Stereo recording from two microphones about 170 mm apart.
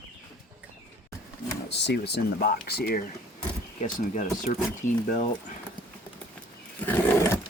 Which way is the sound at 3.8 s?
45° left (ahead or behind).